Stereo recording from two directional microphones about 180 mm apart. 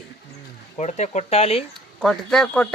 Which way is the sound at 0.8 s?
40° left (ahead or behind).